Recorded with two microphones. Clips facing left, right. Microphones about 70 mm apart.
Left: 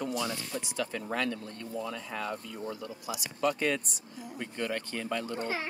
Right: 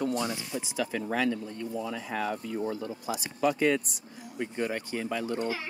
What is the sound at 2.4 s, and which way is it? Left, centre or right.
Speech, right.